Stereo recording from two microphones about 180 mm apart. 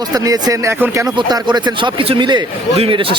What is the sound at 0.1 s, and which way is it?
Speech, 20° right (ahead or behind).